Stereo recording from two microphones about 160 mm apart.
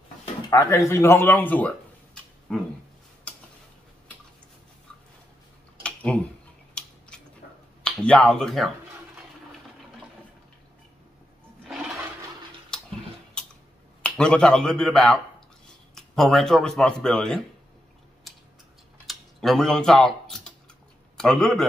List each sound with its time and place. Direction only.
0.5 s speech: 20° left (ahead or behind); by 2.6 s 5° left (ahead or behind)
3.3 s tick-tock: 10° left (ahead or behind)
5.8 s a sound: 10° left (ahead or behind)
7.8 s speech: 5° left (ahead or behind)
14.0 s speech: 5° left (ahead or behind)
19.0 s typing: centre (ahead or behind)
21.2 s speech: 5° left (ahead or behind)